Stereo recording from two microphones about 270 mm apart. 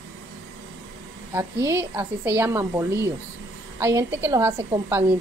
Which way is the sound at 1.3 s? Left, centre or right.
Centre.